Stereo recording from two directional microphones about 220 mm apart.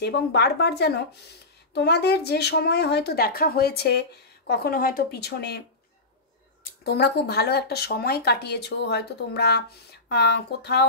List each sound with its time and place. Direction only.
0.0 s speech: 50° left (ahead or behind)
6.8 s speech: 45° left (ahead or behind)